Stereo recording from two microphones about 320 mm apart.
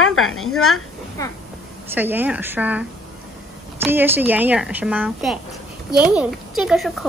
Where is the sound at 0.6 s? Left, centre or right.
Left.